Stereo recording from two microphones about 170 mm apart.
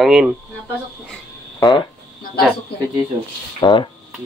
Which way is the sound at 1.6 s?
20° left (ahead or behind).